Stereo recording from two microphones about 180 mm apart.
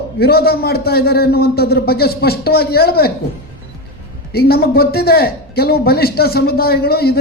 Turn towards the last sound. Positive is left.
turn(degrees=60)  # may be behind; listen again after turning